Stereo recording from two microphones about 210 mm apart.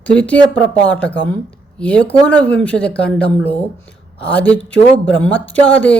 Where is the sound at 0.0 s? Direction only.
5° left (ahead or behind).